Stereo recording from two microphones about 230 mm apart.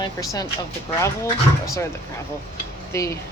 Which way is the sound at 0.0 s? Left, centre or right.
Centre.